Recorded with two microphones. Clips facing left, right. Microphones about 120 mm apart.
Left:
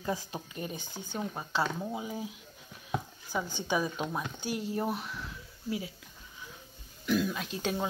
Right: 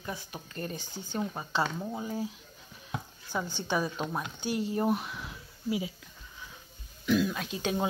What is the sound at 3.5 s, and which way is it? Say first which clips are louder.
Speech: even; 10° left (ahead or behind).